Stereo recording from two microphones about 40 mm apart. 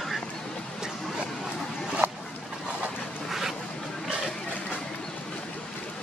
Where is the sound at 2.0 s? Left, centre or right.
Right.